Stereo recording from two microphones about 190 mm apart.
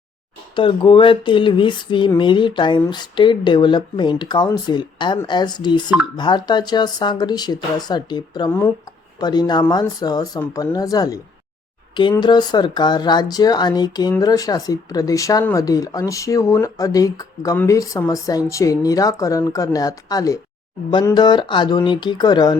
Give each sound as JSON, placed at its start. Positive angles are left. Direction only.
{"t": 0.5, "sound": "speech", "side_deg": 25}